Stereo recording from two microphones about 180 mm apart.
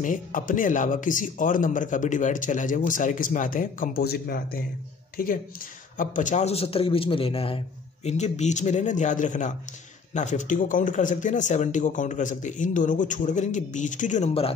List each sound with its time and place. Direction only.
0.0 s a man's voice: 45° left (ahead or behind)